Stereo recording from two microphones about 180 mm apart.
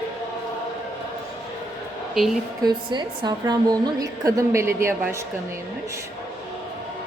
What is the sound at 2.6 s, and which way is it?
A woman's voice, 25° right (ahead or behind).